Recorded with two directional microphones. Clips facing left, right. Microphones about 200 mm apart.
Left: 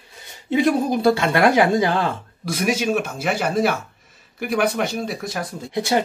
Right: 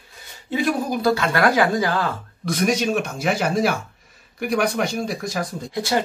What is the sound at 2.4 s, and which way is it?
Speech, 5° left (ahead or behind).